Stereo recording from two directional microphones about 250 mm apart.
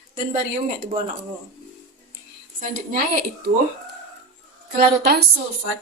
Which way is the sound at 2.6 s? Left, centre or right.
Right.